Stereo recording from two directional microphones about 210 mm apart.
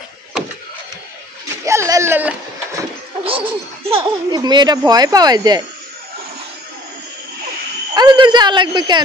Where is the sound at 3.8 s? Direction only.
25° right (ahead or behind).